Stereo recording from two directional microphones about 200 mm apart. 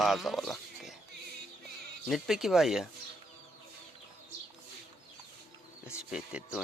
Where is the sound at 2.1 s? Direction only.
Centre (ahead or behind).